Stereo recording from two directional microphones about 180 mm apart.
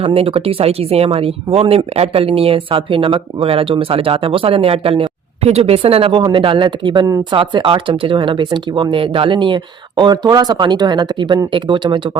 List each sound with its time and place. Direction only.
0.0 s speech: 30° right (ahead or behind)